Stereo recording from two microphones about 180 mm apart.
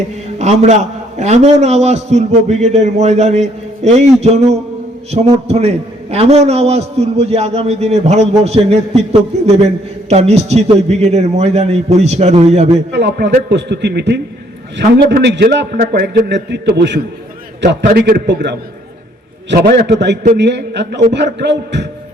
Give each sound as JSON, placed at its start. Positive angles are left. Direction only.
{"t": 0.3, "sound": "a man's voice", "side_deg": -40}
{"t": 12.9, "sound": "a man's voice", "side_deg": -70}
{"t": 17.9, "sound": "a man's voice", "side_deg": -60}